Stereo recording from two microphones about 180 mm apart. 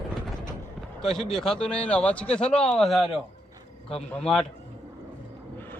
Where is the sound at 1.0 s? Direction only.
5° left (ahead or behind).